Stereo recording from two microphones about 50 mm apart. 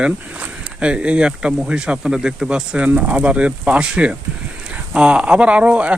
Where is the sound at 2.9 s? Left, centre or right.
Right.